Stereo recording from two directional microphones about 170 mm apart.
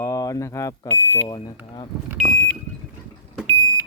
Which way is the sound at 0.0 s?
20° left (ahead or behind).